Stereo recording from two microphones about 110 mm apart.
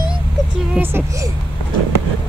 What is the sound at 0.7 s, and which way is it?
Speech, 20° right (ahead or behind).